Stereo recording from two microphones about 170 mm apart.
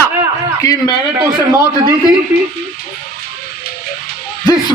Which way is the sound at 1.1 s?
15° right (ahead or behind).